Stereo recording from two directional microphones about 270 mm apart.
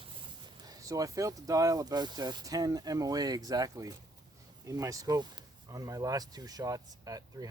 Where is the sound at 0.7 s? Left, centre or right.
Centre.